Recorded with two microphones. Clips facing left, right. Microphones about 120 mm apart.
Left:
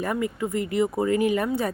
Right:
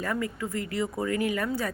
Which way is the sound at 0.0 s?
20° left (ahead or behind).